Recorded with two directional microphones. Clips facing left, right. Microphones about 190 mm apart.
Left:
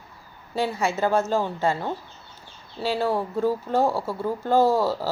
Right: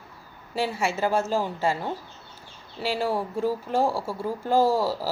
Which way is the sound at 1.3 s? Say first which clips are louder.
Left 2 dB; 10° right (ahead or behind).